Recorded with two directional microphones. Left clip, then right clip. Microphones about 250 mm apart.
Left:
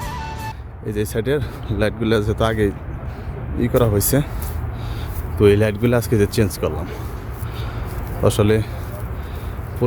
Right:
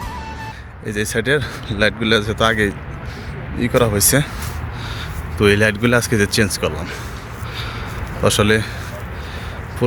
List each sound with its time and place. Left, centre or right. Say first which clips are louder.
0.9 s speech: right 3 dB; centre
5.4 s speech: right 1 dB; centre
8.2 s speech: right 2 dB; centre